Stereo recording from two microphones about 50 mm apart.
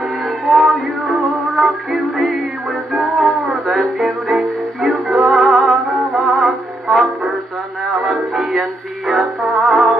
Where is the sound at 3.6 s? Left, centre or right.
Centre.